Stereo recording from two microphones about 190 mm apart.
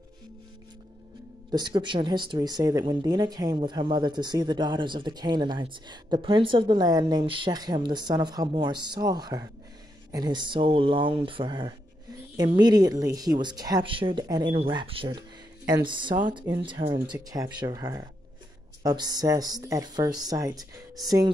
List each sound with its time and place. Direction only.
1.5 s speech: 25° right (ahead or behind)